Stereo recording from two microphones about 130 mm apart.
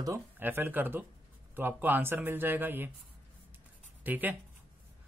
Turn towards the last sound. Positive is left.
turn(degrees=-15)  # may be behind; listen again after turning